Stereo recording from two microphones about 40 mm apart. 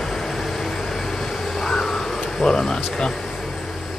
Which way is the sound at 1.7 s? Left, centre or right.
Centre.